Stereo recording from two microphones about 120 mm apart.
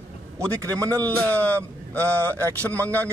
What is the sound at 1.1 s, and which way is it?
Speech, 10° left (ahead or behind).